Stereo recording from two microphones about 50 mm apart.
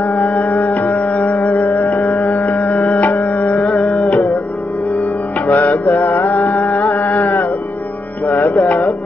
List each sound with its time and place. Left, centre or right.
0.1 s music: left
5.5 s music: left
6.2 s music: left
6.9 s a sound: left
8.3 s music: left